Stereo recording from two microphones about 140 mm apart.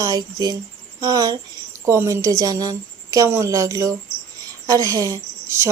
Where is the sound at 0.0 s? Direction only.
25° right (ahead or behind).